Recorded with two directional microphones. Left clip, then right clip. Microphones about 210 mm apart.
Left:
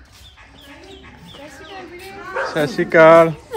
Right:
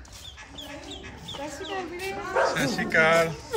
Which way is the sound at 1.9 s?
5° right (ahead or behind).